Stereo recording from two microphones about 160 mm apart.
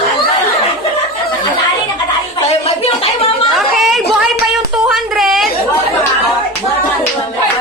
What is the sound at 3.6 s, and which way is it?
Chatter, centre (ahead or behind).